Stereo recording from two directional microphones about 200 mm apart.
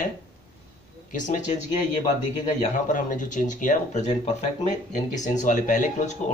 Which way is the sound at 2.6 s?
40° left (ahead or behind).